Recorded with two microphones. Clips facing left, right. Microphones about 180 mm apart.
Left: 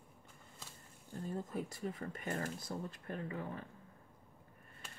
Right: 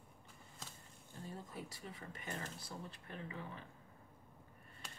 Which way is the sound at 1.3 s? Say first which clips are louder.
Left 8 dB; 50° left (ahead or behind).